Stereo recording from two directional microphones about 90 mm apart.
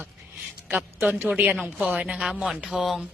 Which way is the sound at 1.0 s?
15° right (ahead or behind).